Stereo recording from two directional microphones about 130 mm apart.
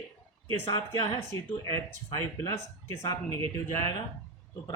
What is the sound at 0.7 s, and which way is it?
Speech, 30° left (ahead or behind).